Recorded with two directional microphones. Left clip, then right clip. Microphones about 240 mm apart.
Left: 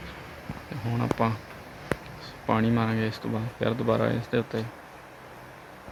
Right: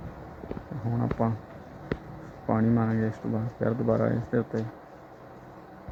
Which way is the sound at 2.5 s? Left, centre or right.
Centre.